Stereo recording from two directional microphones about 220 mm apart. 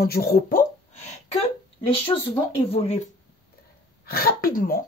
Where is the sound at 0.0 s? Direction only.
45° left (ahead or behind).